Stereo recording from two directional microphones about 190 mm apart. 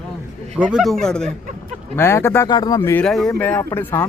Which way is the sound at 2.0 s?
15° left (ahead or behind).